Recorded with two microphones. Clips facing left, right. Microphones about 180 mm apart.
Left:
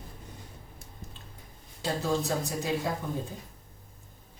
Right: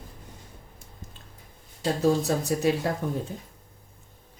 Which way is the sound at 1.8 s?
70° right (ahead or behind).